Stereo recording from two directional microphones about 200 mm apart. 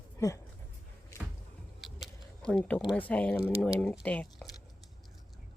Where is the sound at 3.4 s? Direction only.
5° left (ahead or behind).